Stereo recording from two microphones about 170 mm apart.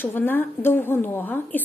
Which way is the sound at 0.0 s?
10° left (ahead or behind).